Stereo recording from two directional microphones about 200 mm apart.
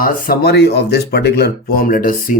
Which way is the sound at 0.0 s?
45° left (ahead or behind).